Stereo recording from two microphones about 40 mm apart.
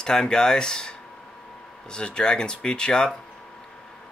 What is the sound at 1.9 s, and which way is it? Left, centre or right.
Speech, left.